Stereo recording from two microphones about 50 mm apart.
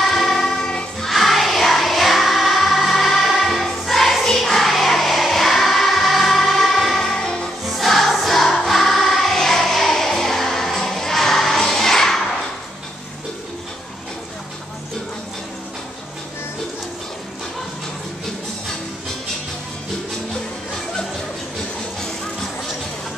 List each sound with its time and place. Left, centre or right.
0.0 s choir: centre
1.1 s music: centre
7.0 s music: centre
7.6 s choir: centre